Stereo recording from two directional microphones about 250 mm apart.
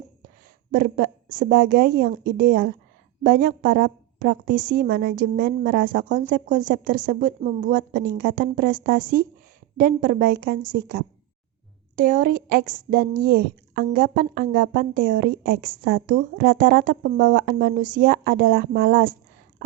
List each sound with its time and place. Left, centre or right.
0.7 s speech: right
7.9 s speech: right